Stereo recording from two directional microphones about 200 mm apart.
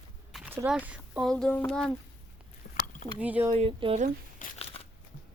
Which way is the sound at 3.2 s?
10° right (ahead or behind).